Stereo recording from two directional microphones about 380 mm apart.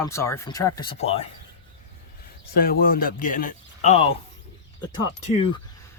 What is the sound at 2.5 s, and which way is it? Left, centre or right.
Speech, left.